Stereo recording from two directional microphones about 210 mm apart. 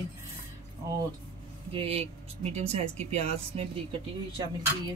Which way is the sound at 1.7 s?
25° right (ahead or behind).